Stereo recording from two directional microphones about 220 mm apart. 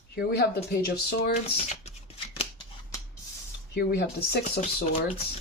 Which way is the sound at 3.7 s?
45° left (ahead or behind).